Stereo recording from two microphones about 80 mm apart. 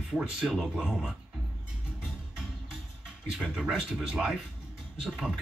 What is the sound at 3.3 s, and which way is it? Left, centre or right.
Speech, centre.